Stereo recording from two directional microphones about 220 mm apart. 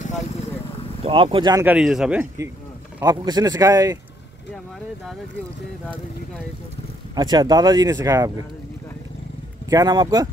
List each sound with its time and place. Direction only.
1.0 s speech: 25° right (ahead or behind)
7.2 s speech: 20° right (ahead or behind)
9.7 s speech: 15° right (ahead or behind)